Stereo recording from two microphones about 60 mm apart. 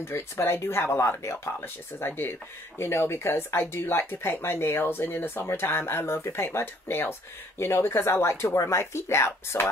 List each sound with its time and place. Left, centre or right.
0.1 s speech: left